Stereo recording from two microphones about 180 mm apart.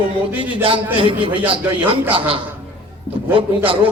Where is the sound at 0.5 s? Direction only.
30° right (ahead or behind).